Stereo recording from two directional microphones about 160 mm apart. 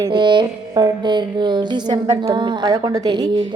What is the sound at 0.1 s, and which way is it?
Speech, 30° right (ahead or behind).